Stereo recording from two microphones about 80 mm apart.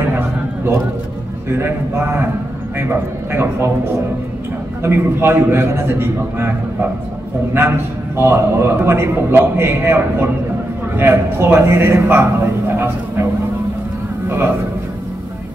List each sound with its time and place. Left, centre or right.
1.5 s a man's voice: right
4.8 s a man's voice: right
14.3 s a man's voice: right